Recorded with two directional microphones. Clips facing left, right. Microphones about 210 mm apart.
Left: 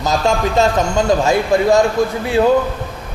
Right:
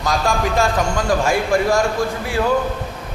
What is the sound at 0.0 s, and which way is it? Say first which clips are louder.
A man's voice: left 3 dB; 25° left (ahead or behind).